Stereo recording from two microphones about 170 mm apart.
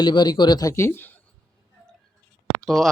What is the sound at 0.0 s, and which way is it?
Speech, 25° left (ahead or behind).